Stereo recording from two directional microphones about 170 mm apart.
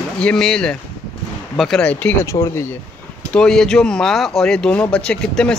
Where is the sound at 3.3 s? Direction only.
5° left (ahead or behind).